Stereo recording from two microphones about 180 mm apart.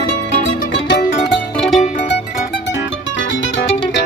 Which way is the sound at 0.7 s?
75° left (ahead or behind).